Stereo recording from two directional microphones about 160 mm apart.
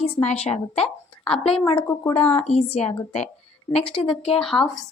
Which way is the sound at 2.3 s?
40° left (ahead or behind).